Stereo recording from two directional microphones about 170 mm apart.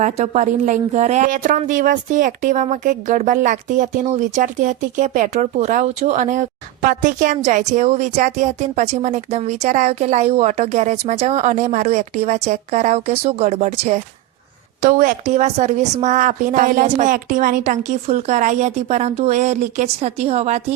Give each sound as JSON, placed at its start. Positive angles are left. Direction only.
{"t": 0.0, "sound": "a woman's voice", "side_deg": -45}